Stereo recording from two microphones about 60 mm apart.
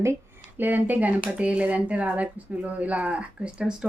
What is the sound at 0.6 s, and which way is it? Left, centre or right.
A woman's voice, right.